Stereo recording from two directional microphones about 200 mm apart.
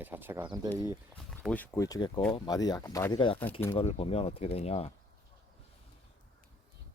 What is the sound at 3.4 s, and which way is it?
Speech, 10° left (ahead or behind).